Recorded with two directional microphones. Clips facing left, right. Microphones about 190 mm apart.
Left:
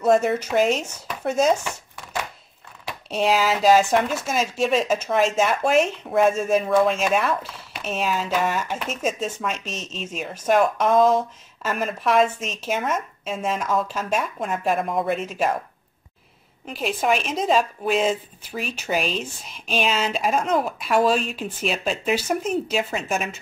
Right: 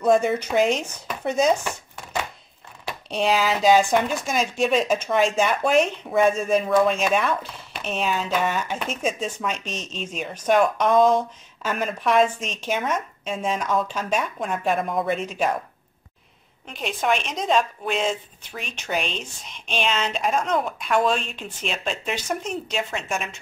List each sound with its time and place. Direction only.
0.0 s speech: 5° left (ahead or behind)
3.1 s speech: 5° left (ahead or behind)
16.6 s speech: 5° left (ahead or behind)